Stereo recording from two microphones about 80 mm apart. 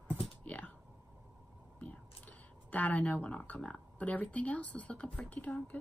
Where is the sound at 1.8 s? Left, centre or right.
Centre.